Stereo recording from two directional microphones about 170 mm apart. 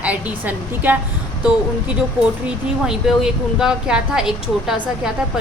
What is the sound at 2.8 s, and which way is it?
A woman's voice, 5° right (ahead or behind).